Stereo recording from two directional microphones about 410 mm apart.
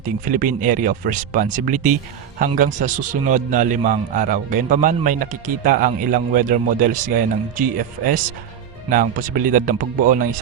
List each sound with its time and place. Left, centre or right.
0.3 s a man's voice: centre